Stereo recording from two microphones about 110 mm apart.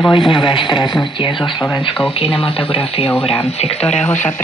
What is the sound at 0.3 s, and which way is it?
Speech, 50° left (ahead or behind).